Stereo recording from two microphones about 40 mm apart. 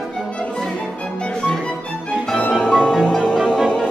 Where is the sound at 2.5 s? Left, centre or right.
Centre.